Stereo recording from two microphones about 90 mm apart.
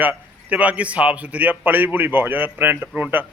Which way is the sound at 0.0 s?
20° right (ahead or behind).